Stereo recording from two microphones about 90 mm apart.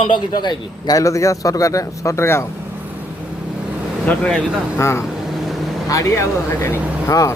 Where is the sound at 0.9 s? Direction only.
40° left (ahead or behind).